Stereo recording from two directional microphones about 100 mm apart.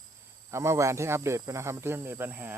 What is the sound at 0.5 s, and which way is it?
Speech, 25° right (ahead or behind).